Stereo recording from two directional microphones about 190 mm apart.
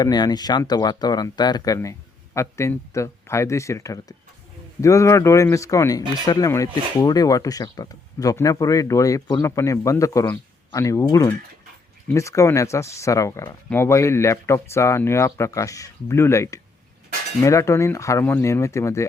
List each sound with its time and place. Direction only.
0.0 s speech: 20° left (ahead or behind)